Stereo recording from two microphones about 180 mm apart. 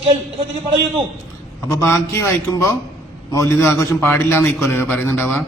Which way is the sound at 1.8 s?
15° left (ahead or behind).